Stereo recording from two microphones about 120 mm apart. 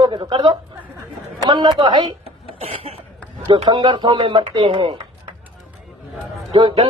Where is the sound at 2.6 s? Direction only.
55° right (ahead or behind).